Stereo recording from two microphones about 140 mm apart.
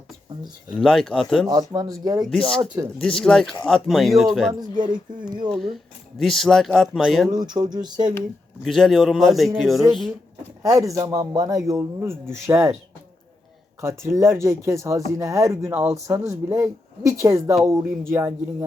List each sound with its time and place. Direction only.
0.7 s speech: centre (ahead or behind)
1.5 s speech: 25° right (ahead or behind)
2.2 s speech: centre (ahead or behind)
2.6 s speech: 30° right (ahead or behind)
3.0 s speech: 5° left (ahead or behind)
7.3 s speech: 30° right (ahead or behind)
8.6 s speech: centre (ahead or behind)
10.6 s speech: 25° right (ahead or behind)
13.8 s speech: 20° right (ahead or behind)